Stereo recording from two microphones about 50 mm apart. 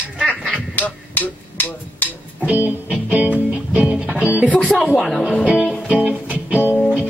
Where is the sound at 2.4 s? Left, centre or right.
Right.